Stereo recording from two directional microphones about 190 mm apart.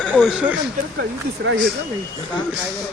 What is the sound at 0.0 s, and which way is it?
Speech, centre (ahead or behind).